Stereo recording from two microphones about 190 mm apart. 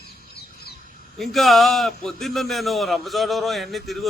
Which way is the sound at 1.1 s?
Centre (ahead or behind).